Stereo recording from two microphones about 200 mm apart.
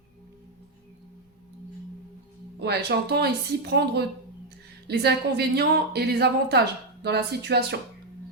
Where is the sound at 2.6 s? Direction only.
55° right (ahead or behind).